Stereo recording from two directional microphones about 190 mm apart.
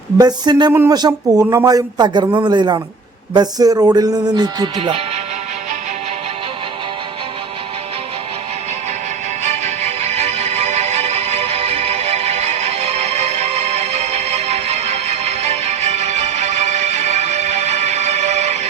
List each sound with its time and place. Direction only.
0.2 s a man's voice: 20° right (ahead or behind)
9.4 s music: 35° right (ahead or behind)